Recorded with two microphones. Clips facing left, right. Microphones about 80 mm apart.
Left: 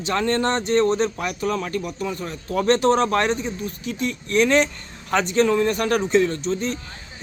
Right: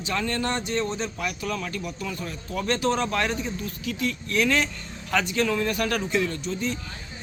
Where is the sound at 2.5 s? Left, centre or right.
Left.